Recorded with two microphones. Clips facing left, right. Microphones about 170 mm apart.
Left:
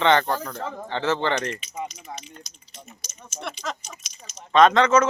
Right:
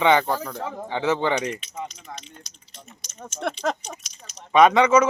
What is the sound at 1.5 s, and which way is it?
Speech, 10° left (ahead or behind).